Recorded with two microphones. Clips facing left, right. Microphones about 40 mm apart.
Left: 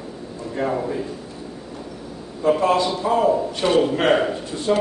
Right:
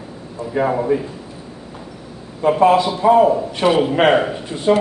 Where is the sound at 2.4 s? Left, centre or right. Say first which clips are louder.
Right 4 dB; right.